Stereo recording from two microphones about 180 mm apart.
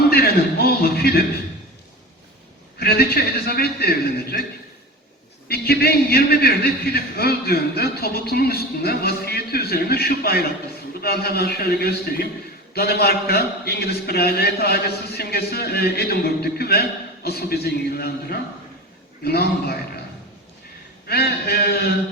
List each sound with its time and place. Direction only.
0.1 s a sound: 60° left (ahead or behind)
3.4 s a man's voice: 60° left (ahead or behind)
5.5 s a man's voice: 60° left (ahead or behind)
21.1 s a man's voice: 60° left (ahead or behind)